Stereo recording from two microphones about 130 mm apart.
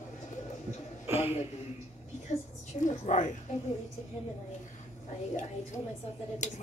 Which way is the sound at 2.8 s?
75° left (ahead or behind).